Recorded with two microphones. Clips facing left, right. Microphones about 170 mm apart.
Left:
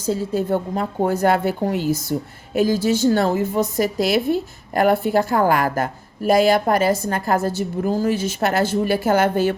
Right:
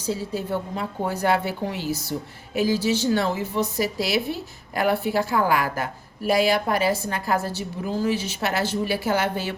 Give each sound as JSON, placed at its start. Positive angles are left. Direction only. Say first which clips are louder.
{"t": 0.0, "sound": "a woman's voice", "louder": "left 6 dB", "side_deg": 50}